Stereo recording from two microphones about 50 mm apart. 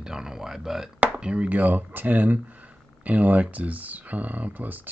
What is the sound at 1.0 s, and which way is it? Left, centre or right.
Speech, right.